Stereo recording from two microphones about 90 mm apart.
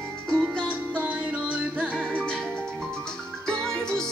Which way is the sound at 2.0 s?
10° left (ahead or behind).